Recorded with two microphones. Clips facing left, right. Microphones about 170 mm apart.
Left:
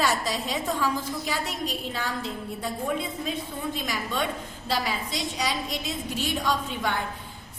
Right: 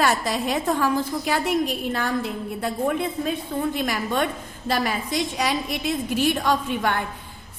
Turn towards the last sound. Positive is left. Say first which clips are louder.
# right 5 dB
turn(degrees=-55)  # may be behind; listen again after turning